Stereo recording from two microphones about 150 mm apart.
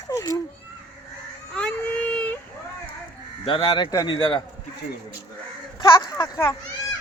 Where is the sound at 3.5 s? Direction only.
30° left (ahead or behind).